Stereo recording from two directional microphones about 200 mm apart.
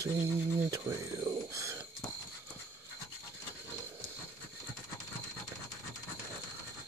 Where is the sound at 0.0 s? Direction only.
10° right (ahead or behind).